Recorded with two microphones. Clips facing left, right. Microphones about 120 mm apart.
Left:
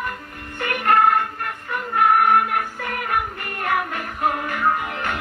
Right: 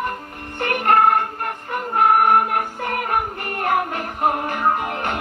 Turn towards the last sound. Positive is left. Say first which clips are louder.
# right 1 dB
turn(degrees=-40)  # may be behind; listen again after turning